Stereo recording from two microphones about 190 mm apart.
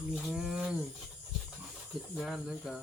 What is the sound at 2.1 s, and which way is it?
Speech, centre (ahead or behind).